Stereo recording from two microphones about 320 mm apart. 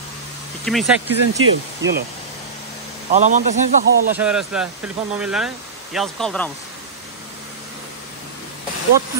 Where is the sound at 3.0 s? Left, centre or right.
Right.